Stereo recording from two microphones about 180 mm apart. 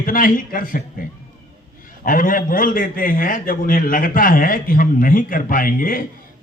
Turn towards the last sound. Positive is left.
turn(degrees=50)  # may be behind; listen again after turning